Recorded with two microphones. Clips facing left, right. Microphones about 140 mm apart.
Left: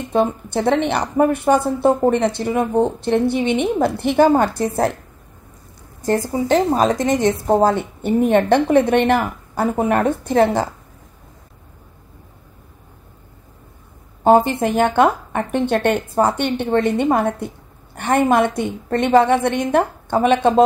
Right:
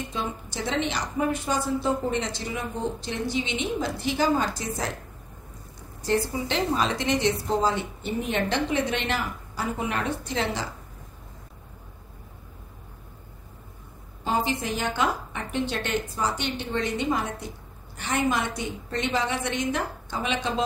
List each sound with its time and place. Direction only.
0.1 s a woman's voice: 60° left (ahead or behind)
6.0 s a woman's voice: 45° left (ahead or behind)
14.2 s a woman's voice: 55° left (ahead or behind)